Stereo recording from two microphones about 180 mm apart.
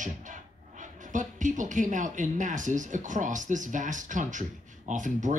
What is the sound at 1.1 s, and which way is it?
Speech, 45° right (ahead or behind).